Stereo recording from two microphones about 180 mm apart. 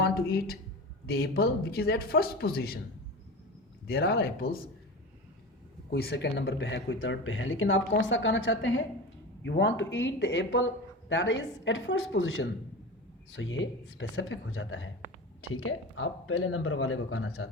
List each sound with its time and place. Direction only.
0.0 s speech: 60° left (ahead or behind)
3.8 s speech: 60° left (ahead or behind)
5.9 s speech: 60° left (ahead or behind); by 12.5 s 75° left (ahead or behind)
13.3 s speech: 90° left
16.6 s speech: 90° left